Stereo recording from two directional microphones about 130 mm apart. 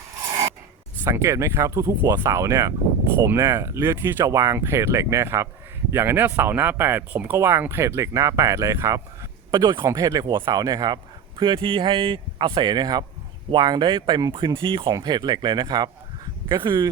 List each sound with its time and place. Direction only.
1.0 s speech: 20° right (ahead or behind)
9.5 s speech: 35° right (ahead or behind)